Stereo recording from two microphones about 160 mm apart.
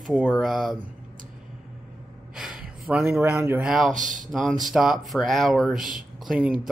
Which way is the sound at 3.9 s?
55° right (ahead or behind).